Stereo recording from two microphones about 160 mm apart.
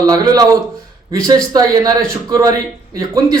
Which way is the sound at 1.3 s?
25° right (ahead or behind).